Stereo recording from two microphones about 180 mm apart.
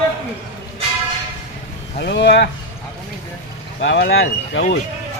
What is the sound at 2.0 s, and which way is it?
Speech, 70° left (ahead or behind).